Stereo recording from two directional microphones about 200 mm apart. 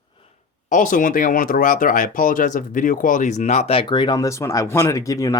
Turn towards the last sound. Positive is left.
turn(degrees=15)  # may be behind; listen again after turning